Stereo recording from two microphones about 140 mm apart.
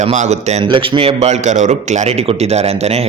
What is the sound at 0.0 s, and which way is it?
Speech, 55° right (ahead or behind).